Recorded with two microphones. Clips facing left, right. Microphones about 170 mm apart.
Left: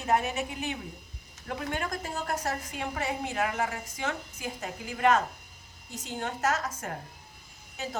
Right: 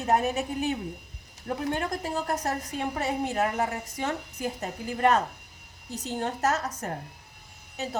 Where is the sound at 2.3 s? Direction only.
40° right (ahead or behind).